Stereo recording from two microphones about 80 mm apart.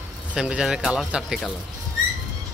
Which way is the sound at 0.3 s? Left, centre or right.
Centre.